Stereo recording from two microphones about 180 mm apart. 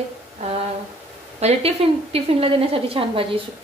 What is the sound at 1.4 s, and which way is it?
A woman's voice, 35° right (ahead or behind).